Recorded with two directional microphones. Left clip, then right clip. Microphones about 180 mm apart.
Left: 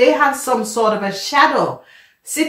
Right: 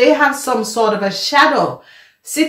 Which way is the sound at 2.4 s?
30° right (ahead or behind).